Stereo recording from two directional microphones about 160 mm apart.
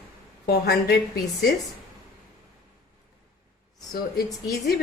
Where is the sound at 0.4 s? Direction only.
85° left.